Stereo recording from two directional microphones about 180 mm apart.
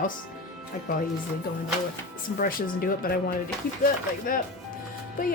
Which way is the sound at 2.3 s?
55° left (ahead or behind).